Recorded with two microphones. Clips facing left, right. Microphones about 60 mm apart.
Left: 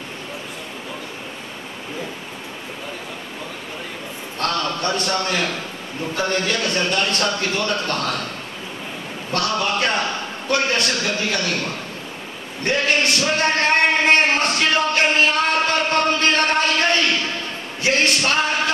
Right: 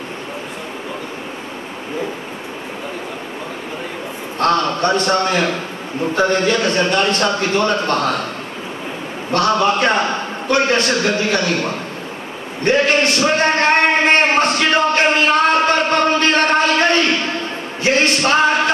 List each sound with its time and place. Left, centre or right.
4.4 s a man's voice: right
4.9 s a man's voice: right
5.2 s a man's voice: right
9.3 s a man's voice: right
12.6 s a sound: right
15.9 s music: right
17.8 s a sound: right
18.2 s a man's voice: right